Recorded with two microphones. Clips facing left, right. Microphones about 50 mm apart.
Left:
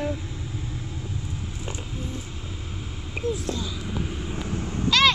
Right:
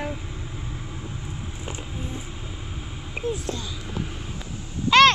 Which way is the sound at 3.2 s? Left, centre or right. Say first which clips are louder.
Even; centre.